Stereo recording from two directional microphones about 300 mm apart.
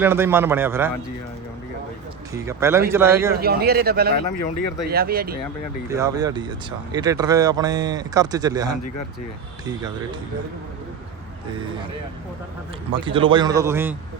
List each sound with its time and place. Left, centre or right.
0.0 s speech: centre
2.3 s speech: centre
3.4 s speech: right
5.9 s speech: centre
12.9 s speech: centre